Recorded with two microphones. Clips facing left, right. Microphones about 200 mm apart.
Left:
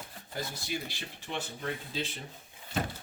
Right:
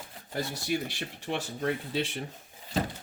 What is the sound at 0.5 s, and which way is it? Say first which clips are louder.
Speech: right 6 dB; 70° right (ahead or behind).